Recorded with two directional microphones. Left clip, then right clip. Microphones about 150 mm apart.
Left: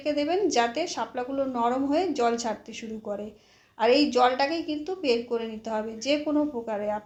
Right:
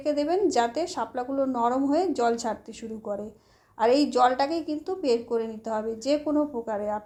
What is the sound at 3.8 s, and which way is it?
A woman's voice, 55° right (ahead or behind).